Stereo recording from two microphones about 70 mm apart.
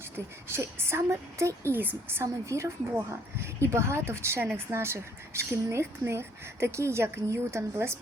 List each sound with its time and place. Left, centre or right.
0.4 s speech: right